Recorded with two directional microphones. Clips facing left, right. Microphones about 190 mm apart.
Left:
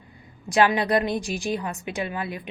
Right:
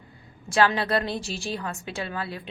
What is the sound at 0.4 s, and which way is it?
A woman's voice, 15° left (ahead or behind).